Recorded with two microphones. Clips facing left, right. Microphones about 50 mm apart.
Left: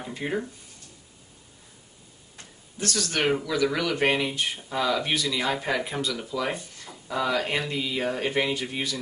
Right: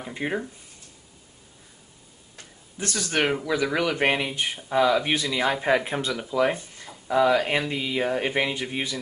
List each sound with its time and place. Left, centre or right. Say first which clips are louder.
0.0 s speech: right 1 dB; centre
2.8 s speech: right 1 dB; right
5.1 s speech: right 2 dB; right
5.9 s speech: right 2 dB; right
6.1 s speech: right 6 dB; centre